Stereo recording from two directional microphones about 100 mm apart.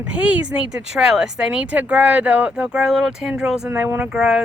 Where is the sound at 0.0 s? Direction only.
10° right (ahead or behind).